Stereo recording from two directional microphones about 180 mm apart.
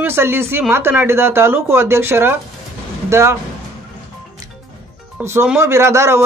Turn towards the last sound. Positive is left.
turn(degrees=-15)  # may be behind; listen again after turning